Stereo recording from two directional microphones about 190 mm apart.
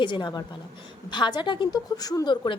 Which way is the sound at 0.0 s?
25° left (ahead or behind).